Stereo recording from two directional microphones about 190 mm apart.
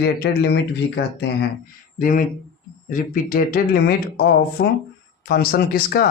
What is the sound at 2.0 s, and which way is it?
Speech, 45° left (ahead or behind).